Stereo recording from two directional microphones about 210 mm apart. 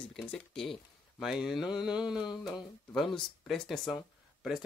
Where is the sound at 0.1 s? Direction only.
5° left (ahead or behind).